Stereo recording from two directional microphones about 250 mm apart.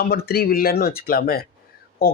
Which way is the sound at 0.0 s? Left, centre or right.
Left.